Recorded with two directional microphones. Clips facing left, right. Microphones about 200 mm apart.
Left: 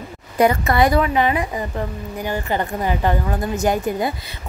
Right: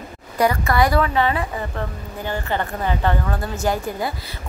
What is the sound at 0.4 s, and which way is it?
A woman's voice, 20° left (ahead or behind).